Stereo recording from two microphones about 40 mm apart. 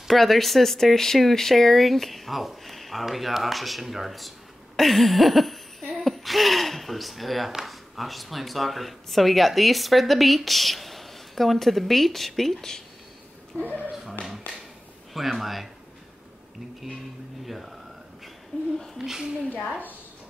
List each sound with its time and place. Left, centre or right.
0.1 s speech: centre
4.7 s a sound: centre
7.6 s speech: centre
13.7 s speech: right
15.1 s speech: centre
17.5 s speech: centre
18.9 s a woman's voice: centre